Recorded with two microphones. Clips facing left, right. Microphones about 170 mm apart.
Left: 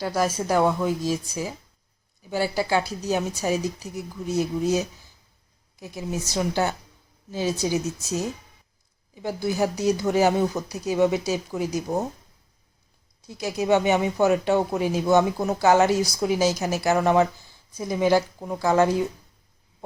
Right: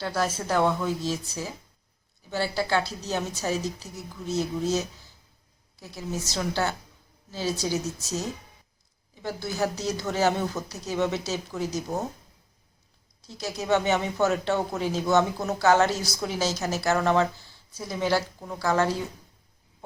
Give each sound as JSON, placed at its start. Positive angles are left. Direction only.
{"t": 0.0, "sound": "speech", "side_deg": 10}
{"t": 5.8, "sound": "a woman's voice", "side_deg": 15}
{"t": 9.2, "sound": "speech", "side_deg": 15}
{"t": 13.2, "sound": "speech", "side_deg": 15}